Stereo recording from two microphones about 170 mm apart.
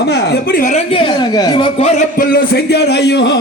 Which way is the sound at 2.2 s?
65° left (ahead or behind).